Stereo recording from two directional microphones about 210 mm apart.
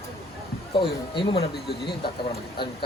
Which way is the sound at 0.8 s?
25° left (ahead or behind).